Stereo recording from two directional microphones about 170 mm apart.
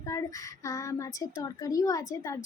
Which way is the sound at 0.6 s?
20° left (ahead or behind).